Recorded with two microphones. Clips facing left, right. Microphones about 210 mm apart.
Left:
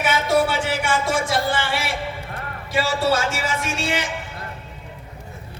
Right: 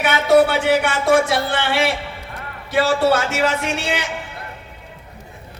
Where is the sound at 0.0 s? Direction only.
60° right (ahead or behind).